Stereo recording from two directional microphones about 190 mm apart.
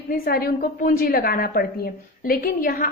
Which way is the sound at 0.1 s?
50° left (ahead or behind).